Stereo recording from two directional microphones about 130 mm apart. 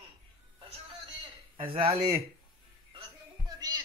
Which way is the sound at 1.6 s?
40° right (ahead or behind).